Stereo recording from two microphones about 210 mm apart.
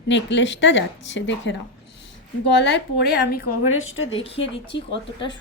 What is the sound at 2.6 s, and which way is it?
Speech, 55° left (ahead or behind).